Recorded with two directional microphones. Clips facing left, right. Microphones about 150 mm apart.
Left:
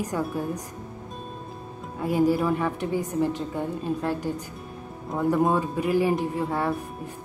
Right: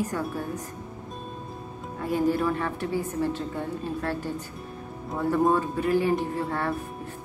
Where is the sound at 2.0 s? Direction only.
10° left (ahead or behind).